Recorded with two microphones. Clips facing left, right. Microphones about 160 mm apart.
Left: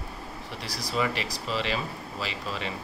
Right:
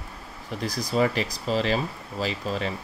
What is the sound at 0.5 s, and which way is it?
Speech, 45° right (ahead or behind).